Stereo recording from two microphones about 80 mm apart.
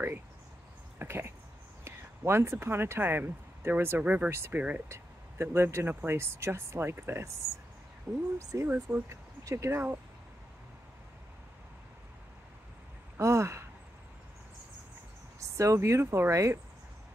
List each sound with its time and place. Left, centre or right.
0.9 s speech: right
4.3 s speech: right
4.6 s speech: centre
4.8 s speech: right
8.1 s speech: centre
8.4 s speech: right
8.7 s speech: centre
9.1 s speech: right
13.2 s speech: right
15.5 s speech: right